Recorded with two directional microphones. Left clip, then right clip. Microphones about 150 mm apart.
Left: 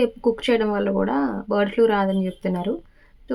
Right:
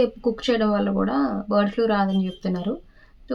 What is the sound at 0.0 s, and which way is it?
Speech, 25° left (ahead or behind).